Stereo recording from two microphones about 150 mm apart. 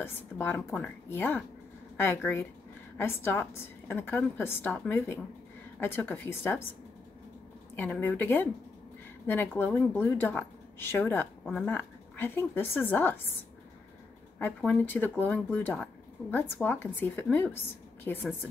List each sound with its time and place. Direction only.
0.0 s a woman's voice: 15° left (ahead or behind)
7.7 s a woman's voice: 10° left (ahead or behind)
14.4 s a woman's voice: 10° left (ahead or behind)